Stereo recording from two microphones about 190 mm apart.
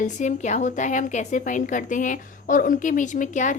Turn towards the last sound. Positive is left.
turn(degrees=40)  # may be behind; listen again after turning